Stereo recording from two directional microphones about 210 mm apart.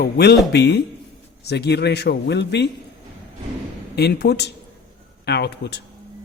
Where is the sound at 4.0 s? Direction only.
50° left (ahead or behind).